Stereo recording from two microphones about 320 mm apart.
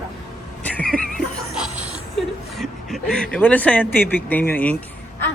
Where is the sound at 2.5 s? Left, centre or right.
Centre.